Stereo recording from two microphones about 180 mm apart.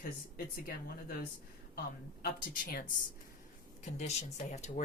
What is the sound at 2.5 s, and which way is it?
Speech, 50° left (ahead or behind).